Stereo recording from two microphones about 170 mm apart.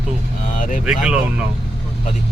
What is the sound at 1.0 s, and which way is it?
Speech, 5° right (ahead or behind).